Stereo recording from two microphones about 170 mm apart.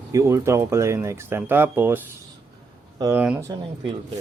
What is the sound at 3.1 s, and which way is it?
Speech, 5° right (ahead or behind).